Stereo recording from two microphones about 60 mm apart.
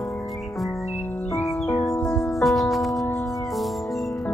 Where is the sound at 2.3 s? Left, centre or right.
Centre.